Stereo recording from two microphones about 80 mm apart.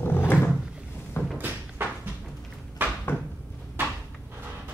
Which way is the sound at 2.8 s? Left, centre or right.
Right.